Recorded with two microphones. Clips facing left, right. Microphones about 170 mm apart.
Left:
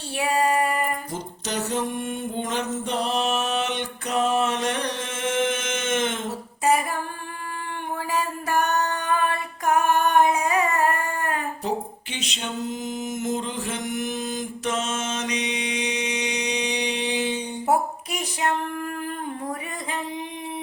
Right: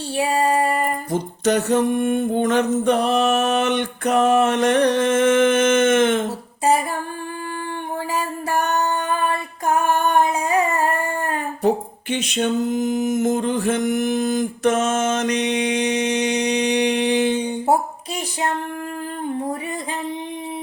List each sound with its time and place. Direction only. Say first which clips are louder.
0.2 s female singing: right 3 dB; 30° right (ahead or behind)
1.1 s a sound: right 10 dB; 55° right (ahead or behind)
8.1 s music: right 1 dB; 30° right (ahead or behind)
12.1 s mantra: right 11 dB; 55° right (ahead or behind)